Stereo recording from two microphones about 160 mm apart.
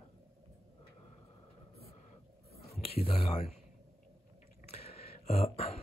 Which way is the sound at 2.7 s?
40° left (ahead or behind).